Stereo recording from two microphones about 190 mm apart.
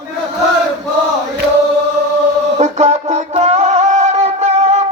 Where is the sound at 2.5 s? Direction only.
35° right (ahead or behind).